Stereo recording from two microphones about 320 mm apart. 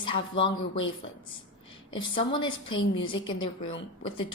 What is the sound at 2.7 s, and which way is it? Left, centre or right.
Speech, left.